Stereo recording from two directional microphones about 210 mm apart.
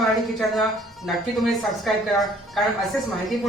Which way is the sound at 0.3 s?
Centre (ahead or behind).